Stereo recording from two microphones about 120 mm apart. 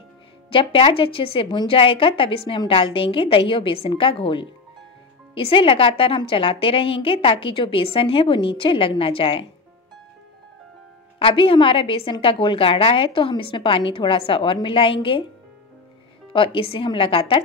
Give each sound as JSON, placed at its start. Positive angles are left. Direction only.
{"t": 0.5, "sound": "a woman's voice", "side_deg": 50}
{"t": 11.1, "sound": "a woman's voice", "side_deg": 50}
{"t": 16.3, "sound": "a woman's voice", "side_deg": 50}